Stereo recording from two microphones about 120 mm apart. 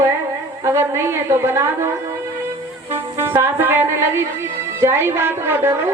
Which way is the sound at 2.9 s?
20° right (ahead or behind).